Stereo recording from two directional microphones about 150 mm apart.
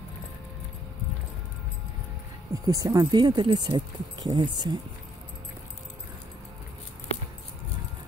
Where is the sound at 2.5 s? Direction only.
25° right (ahead or behind).